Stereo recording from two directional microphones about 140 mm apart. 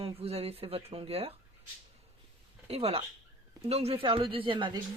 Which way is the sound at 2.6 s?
45° right (ahead or behind).